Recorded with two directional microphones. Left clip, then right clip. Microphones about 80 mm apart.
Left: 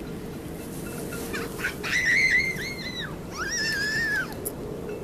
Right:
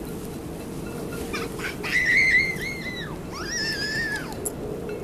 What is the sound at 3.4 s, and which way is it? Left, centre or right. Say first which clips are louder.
Dog: left 1 dB; left.